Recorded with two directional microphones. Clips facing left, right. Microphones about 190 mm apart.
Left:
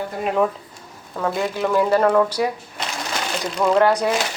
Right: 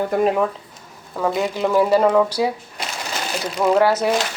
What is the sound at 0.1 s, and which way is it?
Speech, 60° right (ahead or behind).